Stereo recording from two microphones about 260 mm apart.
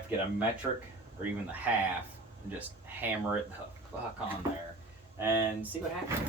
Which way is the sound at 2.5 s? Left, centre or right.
Centre.